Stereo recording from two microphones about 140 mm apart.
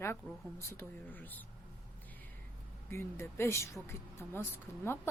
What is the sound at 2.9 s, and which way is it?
Speech, 20° left (ahead or behind).